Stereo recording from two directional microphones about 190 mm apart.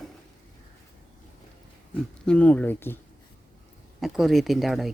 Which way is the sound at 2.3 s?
5° left (ahead or behind).